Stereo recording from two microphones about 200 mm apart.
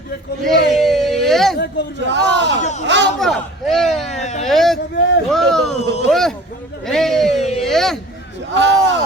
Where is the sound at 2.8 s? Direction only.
60° right (ahead or behind).